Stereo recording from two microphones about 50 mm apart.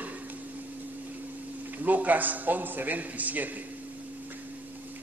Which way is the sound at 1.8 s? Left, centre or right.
Right.